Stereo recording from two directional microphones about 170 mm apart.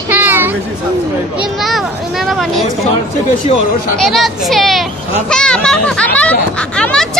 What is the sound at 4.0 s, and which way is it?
Speech, centre (ahead or behind).